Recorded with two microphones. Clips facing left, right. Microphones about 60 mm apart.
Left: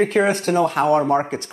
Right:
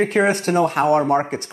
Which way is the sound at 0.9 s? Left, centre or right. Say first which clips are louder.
Even; centre.